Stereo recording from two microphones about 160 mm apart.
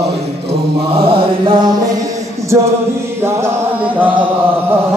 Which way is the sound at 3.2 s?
15° right (ahead or behind).